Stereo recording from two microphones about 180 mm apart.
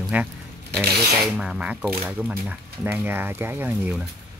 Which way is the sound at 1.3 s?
5° right (ahead or behind).